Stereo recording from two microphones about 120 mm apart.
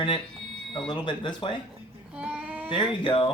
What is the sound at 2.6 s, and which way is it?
Speech, 40° left (ahead or behind).